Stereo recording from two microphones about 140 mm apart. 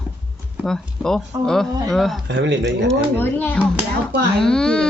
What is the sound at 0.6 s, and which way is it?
Speech, 5° left (ahead or behind).